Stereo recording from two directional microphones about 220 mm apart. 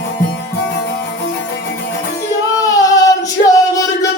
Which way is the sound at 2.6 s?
15° left (ahead or behind).